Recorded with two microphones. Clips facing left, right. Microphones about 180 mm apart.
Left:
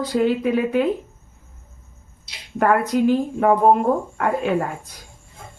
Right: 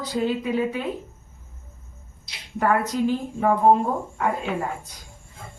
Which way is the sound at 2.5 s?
60° left (ahead or behind).